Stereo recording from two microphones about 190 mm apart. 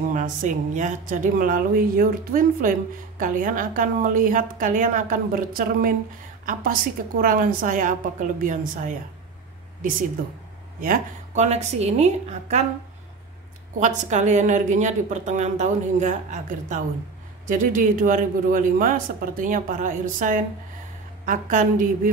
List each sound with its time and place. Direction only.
0.1 s a man's voice: 40° right (ahead or behind)
13.7 s a man's voice: 40° right (ahead or behind)